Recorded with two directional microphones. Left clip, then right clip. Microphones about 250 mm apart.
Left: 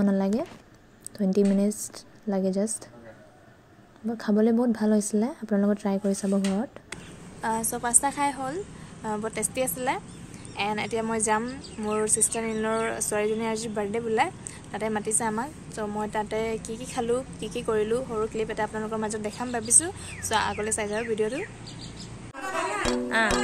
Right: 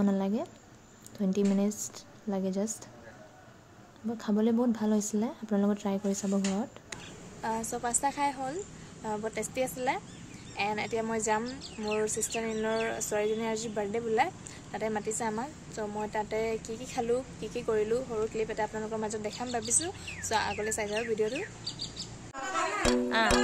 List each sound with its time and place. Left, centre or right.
0.0 s speech: centre
4.2 s speech: centre
7.4 s a woman's voice: centre
22.8 s speech: centre